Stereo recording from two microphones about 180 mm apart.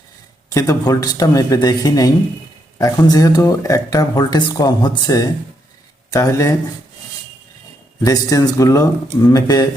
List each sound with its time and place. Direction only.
0.5 s speech: 20° left (ahead or behind)
8.0 s speech: 20° left (ahead or behind)